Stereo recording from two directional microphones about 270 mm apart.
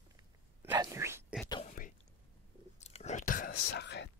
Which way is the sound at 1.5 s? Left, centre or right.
Left.